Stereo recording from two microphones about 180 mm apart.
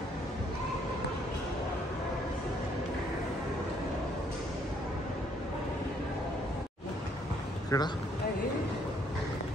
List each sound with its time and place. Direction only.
7.7 s speech: 20° left (ahead or behind)